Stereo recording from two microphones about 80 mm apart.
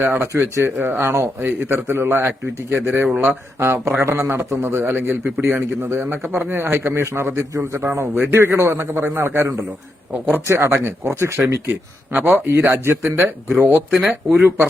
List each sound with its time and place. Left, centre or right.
0.0 s speech: right